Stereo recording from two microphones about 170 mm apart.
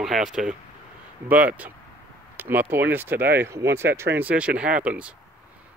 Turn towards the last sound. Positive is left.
turn(degrees=-5)  # may be behind; listen again after turning